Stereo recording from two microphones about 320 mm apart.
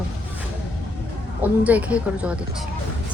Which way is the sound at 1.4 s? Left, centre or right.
Centre.